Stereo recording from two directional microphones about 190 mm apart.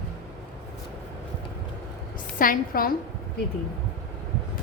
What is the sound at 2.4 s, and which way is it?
Speech, 50° left (ahead or behind).